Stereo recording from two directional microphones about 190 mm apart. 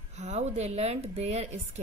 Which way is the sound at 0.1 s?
35° right (ahead or behind).